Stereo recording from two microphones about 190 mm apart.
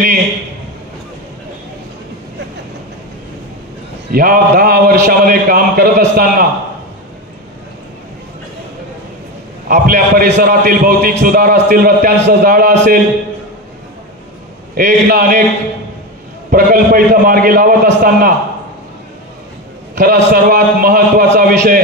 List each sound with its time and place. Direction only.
4.1 s a man's voice: 50° right (ahead or behind)
9.7 s a man's voice: 50° right (ahead or behind)
14.8 s a man's voice: 50° right (ahead or behind)
16.4 s a man's voice: 50° right (ahead or behind)
20.0 s a man's voice: 50° right (ahead or behind)